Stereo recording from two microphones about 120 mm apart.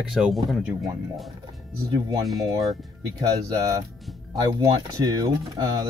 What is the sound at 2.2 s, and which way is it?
Speech, centre (ahead or behind).